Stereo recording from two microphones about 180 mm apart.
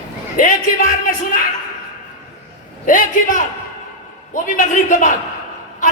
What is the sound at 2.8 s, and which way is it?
Speech, 50° left (ahead or behind).